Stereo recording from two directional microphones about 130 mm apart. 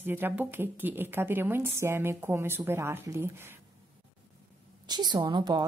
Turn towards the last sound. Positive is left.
turn(degrees=-30)  # may be behind; listen again after turning